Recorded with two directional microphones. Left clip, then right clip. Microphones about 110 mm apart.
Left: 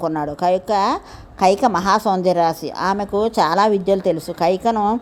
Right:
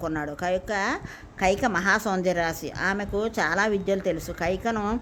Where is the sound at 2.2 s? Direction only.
30° left (ahead or behind).